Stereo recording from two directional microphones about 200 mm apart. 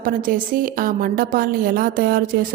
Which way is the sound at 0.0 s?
40° right (ahead or behind).